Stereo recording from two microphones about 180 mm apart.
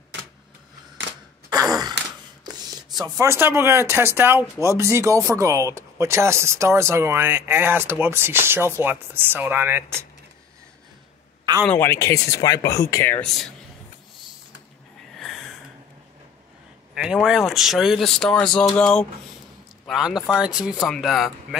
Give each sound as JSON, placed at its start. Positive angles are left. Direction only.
{"t": 1.5, "sound": "sigh", "side_deg": -20}
{"t": 2.4, "sound": "a sound", "side_deg": -20}
{"t": 3.2, "sound": "speech", "side_deg": -15}
{"t": 11.6, "sound": "speech", "side_deg": 10}
{"t": 16.9, "sound": "speech", "side_deg": -5}